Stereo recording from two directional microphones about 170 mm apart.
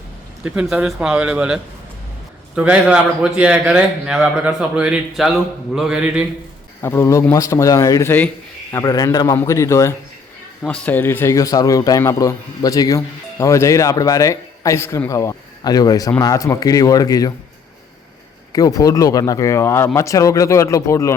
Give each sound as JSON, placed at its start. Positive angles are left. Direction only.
{"t": 0.4, "sound": "a man's voice", "side_deg": -5}
{"t": 5.7, "sound": "mantra", "side_deg": -5}
{"t": 6.8, "sound": "a man's voice", "side_deg": 15}
{"t": 10.6, "sound": "a man's voice", "side_deg": 5}
{"t": 18.5, "sound": "a man's voice", "side_deg": 20}